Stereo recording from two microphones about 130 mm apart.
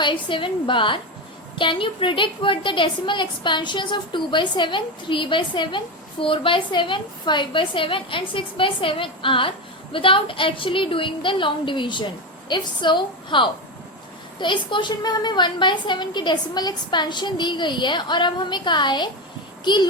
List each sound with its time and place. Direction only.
0.0 s a woman's voice: 40° left (ahead or behind)